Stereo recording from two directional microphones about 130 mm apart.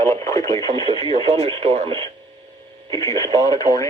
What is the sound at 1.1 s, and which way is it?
Speech, 50° right (ahead or behind).